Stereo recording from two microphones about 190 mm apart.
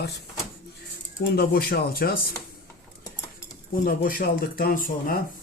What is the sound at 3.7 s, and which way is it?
Speech, 50° left (ahead or behind).